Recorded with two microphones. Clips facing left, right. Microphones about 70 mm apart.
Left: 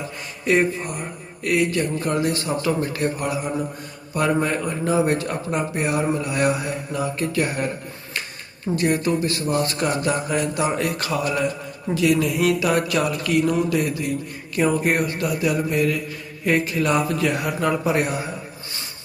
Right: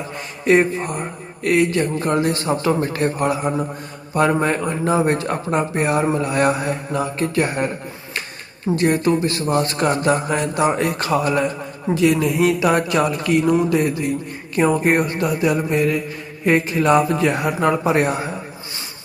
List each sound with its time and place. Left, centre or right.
0.4 s a man's voice: right